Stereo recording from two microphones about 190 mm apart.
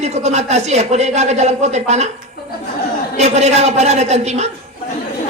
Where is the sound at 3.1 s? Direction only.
35° right (ahead or behind).